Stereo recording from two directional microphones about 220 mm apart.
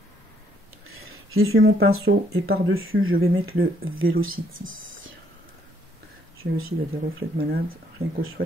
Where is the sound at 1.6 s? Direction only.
70° right (ahead or behind).